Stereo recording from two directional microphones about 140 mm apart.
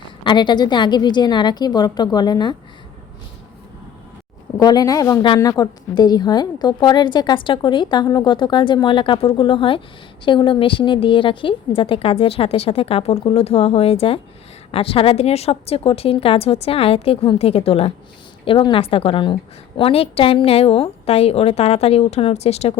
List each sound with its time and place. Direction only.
0.3 s a woman's voice: 35° left (ahead or behind)
4.6 s a woman's voice: 30° left (ahead or behind); by 22.7 s 50° left (ahead or behind)